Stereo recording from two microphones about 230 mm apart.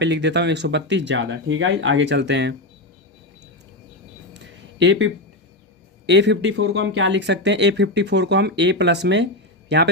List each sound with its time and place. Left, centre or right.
0.0 s speech: right
4.4 s a sound: right
6.1 s speech: right